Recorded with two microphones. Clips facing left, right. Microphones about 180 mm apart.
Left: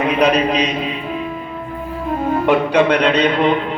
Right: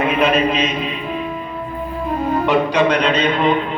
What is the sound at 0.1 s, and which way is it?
Speech, 40° left (ahead or behind).